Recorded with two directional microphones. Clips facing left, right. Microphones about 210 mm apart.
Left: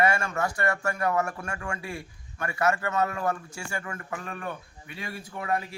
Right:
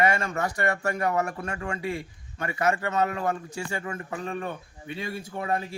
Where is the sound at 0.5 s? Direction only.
20° right (ahead or behind).